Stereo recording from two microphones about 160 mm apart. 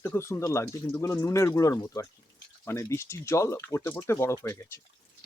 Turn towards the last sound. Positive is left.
turn(degrees=15)  # may be behind; listen again after turning